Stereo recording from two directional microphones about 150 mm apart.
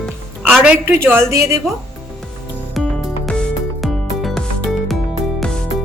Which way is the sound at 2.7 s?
Centre (ahead or behind).